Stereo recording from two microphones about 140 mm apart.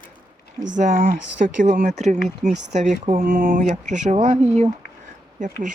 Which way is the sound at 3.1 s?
90° right.